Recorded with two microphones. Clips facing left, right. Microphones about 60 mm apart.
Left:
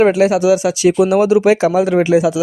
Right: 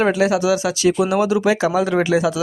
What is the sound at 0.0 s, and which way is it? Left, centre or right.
Speech, left.